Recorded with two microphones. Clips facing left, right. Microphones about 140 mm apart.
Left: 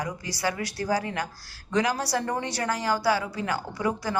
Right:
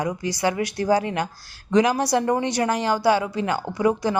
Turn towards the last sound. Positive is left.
turn(degrees=-20)  # may be behind; listen again after turning